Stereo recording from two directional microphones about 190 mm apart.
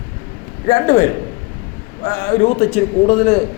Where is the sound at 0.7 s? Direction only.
45° left (ahead or behind).